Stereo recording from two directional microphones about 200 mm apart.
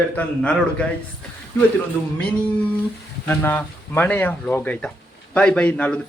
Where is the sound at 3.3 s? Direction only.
10° left (ahead or behind).